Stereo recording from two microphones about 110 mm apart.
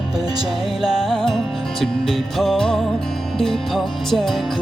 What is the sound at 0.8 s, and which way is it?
Music, 5° right (ahead or behind).